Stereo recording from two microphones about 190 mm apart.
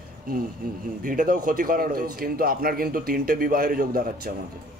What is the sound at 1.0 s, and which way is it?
A man's voice, 45° right (ahead or behind).